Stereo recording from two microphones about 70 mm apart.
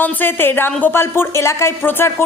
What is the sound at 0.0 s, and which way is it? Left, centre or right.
A woman's voice, left.